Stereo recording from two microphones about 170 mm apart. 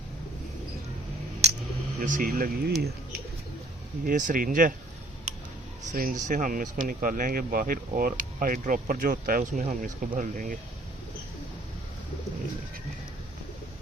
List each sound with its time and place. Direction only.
2.0 s speech: 50° right (ahead or behind)
4.0 s speech: 55° right (ahead or behind)
5.9 s speech: 50° right (ahead or behind)